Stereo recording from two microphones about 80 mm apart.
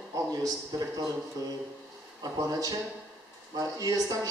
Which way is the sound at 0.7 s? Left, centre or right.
Right.